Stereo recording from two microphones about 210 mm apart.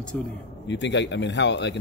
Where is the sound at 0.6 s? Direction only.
60° left (ahead or behind).